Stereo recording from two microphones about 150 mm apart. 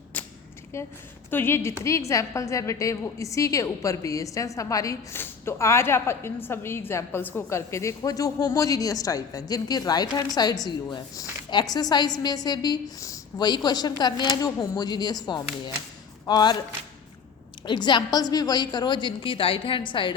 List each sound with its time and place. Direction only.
0.7 s a woman's voice: 20° left (ahead or behind)
17.7 s a woman's voice: 30° left (ahead or behind)